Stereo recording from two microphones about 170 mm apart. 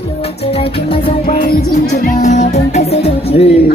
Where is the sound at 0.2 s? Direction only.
35° left (ahead or behind).